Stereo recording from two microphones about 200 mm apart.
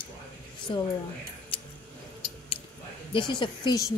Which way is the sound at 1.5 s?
25° left (ahead or behind).